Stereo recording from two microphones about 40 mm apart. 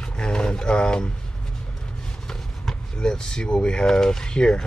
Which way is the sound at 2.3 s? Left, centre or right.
Centre.